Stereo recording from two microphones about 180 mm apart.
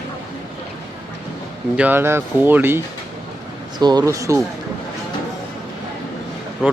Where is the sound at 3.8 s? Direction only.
25° right (ahead or behind).